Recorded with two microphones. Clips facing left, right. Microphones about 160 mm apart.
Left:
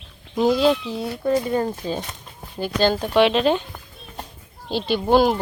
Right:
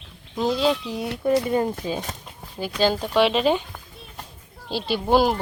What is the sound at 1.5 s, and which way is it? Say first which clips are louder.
Speech: even; 15° right (ahead or behind).